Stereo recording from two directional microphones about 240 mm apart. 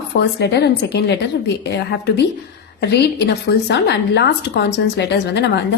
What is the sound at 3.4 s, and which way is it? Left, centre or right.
A woman's voice, left.